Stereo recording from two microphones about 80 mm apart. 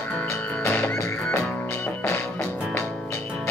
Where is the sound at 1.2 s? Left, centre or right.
Centre.